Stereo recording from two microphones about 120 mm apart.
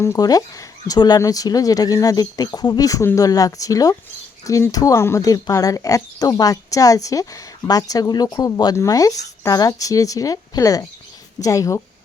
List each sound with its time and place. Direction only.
0.0 s speech: 30° left (ahead or behind)